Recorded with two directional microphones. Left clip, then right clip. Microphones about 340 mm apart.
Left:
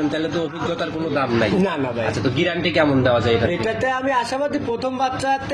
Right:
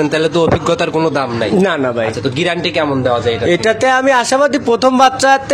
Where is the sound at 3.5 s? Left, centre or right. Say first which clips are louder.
Right 10 dB; right.